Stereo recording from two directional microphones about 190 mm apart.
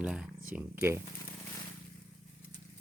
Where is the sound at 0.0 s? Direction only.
5° right (ahead or behind).